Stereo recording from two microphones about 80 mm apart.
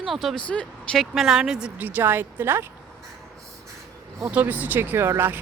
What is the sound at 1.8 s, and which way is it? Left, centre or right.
Speech, right.